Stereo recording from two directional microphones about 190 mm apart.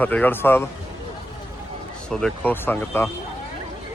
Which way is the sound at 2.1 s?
5° left (ahead or behind).